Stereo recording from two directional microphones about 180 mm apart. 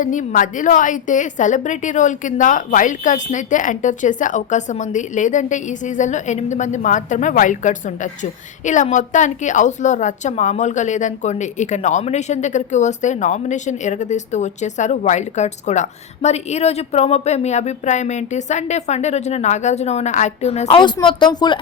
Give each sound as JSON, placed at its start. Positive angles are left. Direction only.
{"t": 0.0, "sound": "a woman's voice", "side_deg": 45}